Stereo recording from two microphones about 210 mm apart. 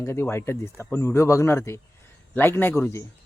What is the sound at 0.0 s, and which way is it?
Speech, 15° left (ahead or behind).